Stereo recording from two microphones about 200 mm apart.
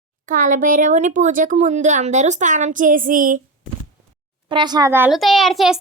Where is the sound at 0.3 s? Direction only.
40° right (ahead or behind).